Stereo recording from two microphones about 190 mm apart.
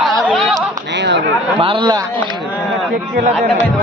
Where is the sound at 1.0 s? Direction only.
65° right (ahead or behind).